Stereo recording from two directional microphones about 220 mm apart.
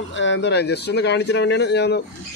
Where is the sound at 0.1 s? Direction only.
55° left (ahead or behind).